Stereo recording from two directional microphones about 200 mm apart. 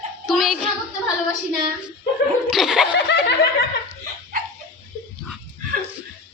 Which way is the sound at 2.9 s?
60° left (ahead or behind).